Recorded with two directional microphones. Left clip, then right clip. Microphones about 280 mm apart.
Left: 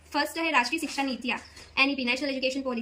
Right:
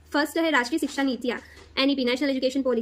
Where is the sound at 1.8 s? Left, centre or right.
Right.